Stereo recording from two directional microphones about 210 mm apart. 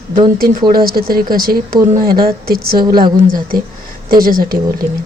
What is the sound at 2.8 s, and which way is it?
Speech, 20° right (ahead or behind).